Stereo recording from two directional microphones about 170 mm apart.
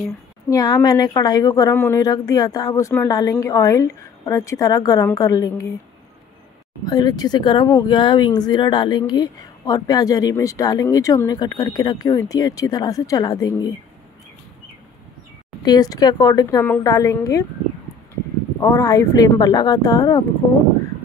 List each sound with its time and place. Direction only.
0.5 s speech: 20° left (ahead or behind)
6.8 s speech: 25° left (ahead or behind)
15.6 s speech: 25° left (ahead or behind)
18.6 s speech: 20° left (ahead or behind)